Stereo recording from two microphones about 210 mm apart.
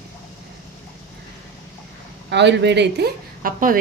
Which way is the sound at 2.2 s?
55° right (ahead or behind).